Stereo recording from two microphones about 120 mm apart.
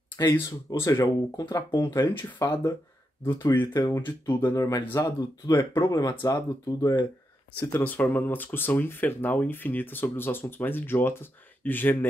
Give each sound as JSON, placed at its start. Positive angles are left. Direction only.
{"t": 0.2, "sound": "speech", "side_deg": 35}
{"t": 7.7, "sound": "speech", "side_deg": 15}